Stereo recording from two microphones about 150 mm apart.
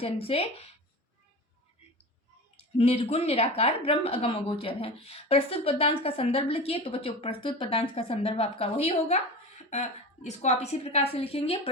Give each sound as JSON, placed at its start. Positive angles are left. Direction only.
{"t": 0.0, "sound": "a woman's voice", "side_deg": 40}
{"t": 2.7, "sound": "a woman's voice", "side_deg": 40}